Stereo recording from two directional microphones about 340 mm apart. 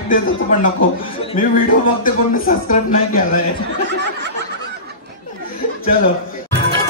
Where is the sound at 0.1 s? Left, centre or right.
Left.